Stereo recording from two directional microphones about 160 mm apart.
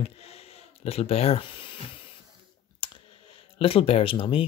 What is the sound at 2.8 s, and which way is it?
Clicking, 30° left (ahead or behind).